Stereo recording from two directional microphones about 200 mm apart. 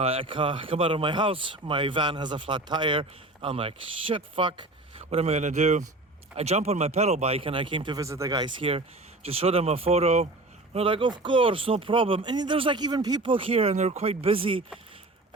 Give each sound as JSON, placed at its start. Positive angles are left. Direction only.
{"t": 0.0, "sound": "speech", "side_deg": -30}